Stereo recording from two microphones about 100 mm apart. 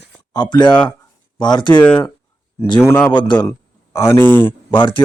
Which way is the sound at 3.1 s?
50° left (ahead or behind).